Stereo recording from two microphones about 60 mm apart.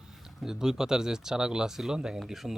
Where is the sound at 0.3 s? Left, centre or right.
Centre.